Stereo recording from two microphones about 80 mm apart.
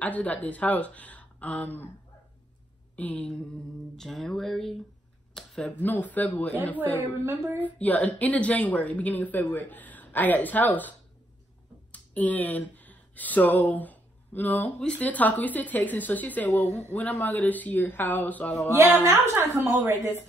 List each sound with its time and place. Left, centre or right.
0.0 s a woman's voice: centre
3.0 s a woman's voice: left
3.9 s speech: centre
5.3 s a sound: centre
5.8 s a woman's voice: left
7.2 s speech: right
7.6 s a woman's voice: centre
19.0 s a woman's voice: right